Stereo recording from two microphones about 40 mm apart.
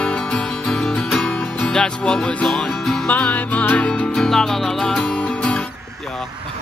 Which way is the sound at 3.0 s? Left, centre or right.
Left.